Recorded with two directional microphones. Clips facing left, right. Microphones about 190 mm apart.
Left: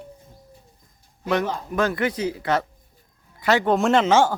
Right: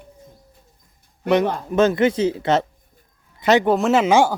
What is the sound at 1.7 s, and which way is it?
Speech, 20° right (ahead or behind).